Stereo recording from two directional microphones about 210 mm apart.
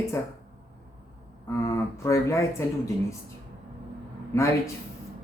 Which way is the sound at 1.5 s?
15° left (ahead or behind).